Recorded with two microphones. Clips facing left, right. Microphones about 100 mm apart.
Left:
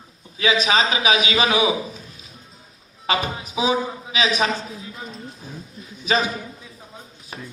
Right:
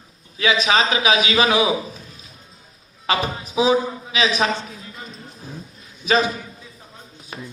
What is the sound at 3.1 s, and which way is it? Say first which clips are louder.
Speech: right 2 dB; 35° right (ahead or behind).